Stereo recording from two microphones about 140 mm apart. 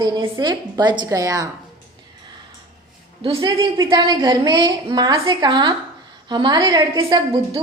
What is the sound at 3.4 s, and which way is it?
A woman's voice, 30° right (ahead or behind).